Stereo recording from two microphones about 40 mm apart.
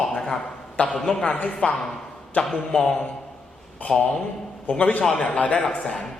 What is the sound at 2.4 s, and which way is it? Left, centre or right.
A man's voice, centre.